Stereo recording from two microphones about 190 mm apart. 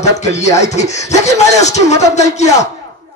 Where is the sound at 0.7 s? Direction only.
35° left (ahead or behind).